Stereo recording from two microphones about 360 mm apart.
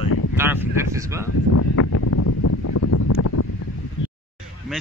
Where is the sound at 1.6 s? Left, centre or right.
Left.